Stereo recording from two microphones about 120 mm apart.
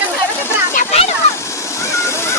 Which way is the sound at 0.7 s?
75° left (ahead or behind).